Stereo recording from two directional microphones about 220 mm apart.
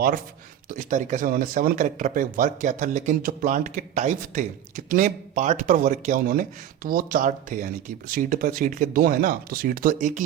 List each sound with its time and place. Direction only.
0.7 s speech: 35° right (ahead or behind)